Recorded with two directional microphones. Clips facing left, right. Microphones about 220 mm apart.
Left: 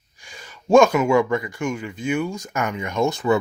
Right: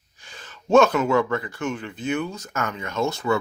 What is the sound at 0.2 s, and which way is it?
Speech, 10° left (ahead or behind).